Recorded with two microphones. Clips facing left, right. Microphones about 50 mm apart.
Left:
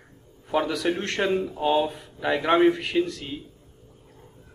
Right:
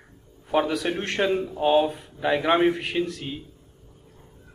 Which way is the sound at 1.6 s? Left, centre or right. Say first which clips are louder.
Right 4 dB; right.